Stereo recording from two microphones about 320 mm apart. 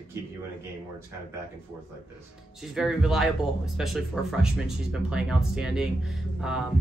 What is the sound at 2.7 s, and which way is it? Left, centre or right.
Speech, centre.